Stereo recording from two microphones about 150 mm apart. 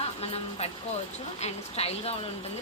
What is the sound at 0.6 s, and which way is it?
Speech, 45° left (ahead or behind).